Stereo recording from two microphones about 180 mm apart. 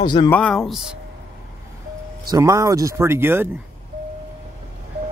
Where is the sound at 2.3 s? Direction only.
15° right (ahead or behind).